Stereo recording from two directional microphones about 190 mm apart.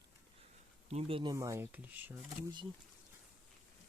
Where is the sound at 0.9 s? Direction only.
30° right (ahead or behind); by 2.1 s 10° right (ahead or behind).